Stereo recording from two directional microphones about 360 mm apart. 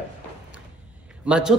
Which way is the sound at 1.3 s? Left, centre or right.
Centre.